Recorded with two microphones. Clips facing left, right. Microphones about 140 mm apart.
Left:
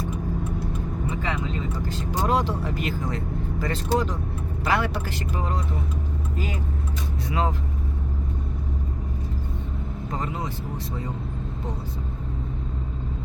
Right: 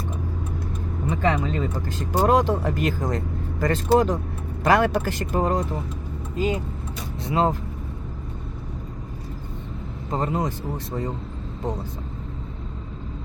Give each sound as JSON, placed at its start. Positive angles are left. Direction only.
{"t": 1.1, "sound": "vehicle", "side_deg": -55}
{"t": 1.9, "sound": "speech", "side_deg": -50}
{"t": 6.3, "sound": "speech", "side_deg": -20}
{"t": 10.2, "sound": "speech", "side_deg": -45}